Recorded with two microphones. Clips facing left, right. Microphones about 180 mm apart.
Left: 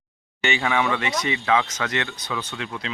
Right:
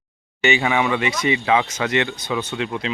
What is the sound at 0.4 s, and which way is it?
Speech, 10° right (ahead or behind).